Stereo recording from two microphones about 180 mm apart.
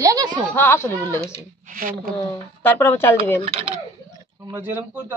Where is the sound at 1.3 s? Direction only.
50° right (ahead or behind).